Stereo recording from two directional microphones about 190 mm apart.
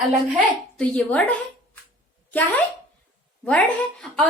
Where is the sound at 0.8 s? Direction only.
5° left (ahead or behind).